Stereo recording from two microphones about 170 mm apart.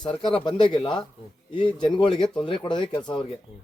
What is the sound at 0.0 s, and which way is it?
Speech, 25° left (ahead or behind).